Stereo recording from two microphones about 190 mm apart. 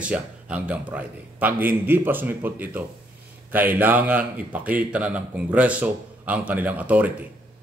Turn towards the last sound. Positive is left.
turn(degrees=-10)  # may be behind; listen again after turning